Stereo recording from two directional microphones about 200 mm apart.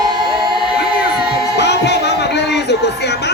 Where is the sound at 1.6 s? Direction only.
60° left (ahead or behind).